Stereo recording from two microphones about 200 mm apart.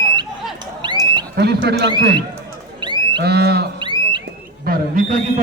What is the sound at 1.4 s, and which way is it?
Speech, 55° right (ahead or behind).